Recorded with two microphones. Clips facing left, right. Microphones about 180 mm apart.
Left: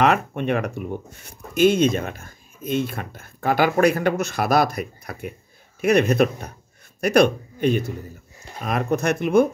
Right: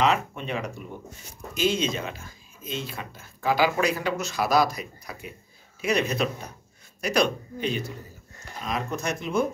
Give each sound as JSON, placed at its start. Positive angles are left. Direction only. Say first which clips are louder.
{"t": 0.0, "sound": "speech", "louder": "left 5 dB", "side_deg": 55}